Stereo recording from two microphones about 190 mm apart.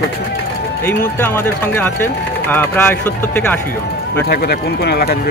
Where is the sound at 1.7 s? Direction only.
10° left (ahead or behind).